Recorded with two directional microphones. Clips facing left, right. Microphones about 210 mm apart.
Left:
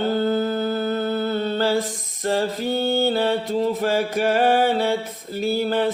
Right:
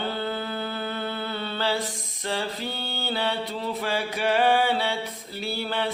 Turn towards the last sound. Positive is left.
turn(degrees=45)  # may be behind; listen again after turning